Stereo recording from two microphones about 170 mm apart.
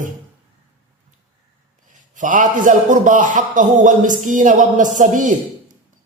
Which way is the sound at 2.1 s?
50° right (ahead or behind).